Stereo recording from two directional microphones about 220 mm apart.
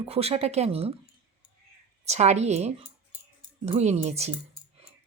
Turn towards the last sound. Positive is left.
turn(degrees=-30)  # may be behind; listen again after turning